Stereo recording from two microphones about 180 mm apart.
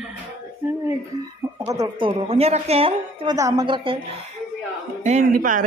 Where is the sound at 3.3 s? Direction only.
20° right (ahead or behind).